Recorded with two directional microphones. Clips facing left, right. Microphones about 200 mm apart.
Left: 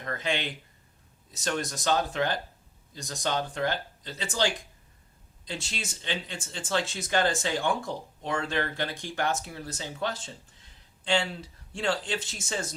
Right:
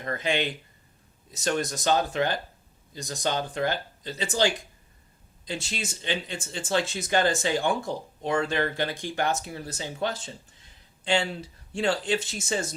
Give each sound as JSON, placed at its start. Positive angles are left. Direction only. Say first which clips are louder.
{"t": 0.0, "sound": "speech", "louder": "right 4 dB", "side_deg": -15}